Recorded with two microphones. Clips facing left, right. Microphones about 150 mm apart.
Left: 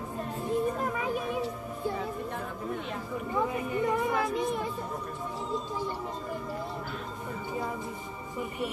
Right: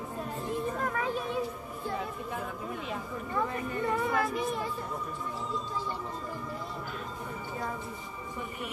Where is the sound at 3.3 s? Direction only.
15° left (ahead or behind).